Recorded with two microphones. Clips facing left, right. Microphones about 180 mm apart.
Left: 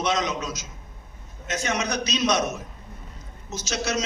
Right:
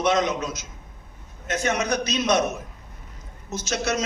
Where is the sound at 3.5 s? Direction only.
55° right (ahead or behind).